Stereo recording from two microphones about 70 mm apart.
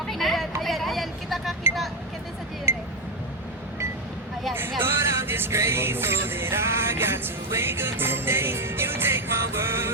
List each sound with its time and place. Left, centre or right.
0.1 s a sound: centre
0.6 s vehicle: centre
4.8 s music: right